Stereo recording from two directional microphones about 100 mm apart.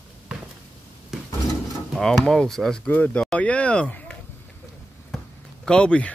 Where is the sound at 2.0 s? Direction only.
5° left (ahead or behind).